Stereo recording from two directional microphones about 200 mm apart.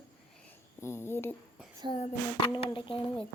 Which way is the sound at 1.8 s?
25° right (ahead or behind).